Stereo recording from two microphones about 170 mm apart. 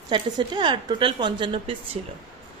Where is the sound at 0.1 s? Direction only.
25° right (ahead or behind).